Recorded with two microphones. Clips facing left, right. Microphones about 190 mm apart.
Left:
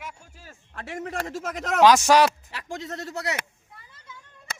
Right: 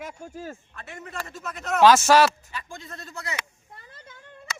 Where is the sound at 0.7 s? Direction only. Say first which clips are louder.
Left 6 dB; 90° left.